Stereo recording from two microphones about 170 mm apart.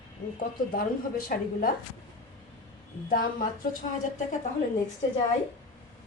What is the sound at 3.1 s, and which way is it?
Speech, 60° left (ahead or behind).